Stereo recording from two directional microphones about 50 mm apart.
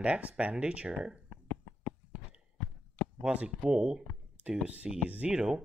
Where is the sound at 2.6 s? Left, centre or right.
Left.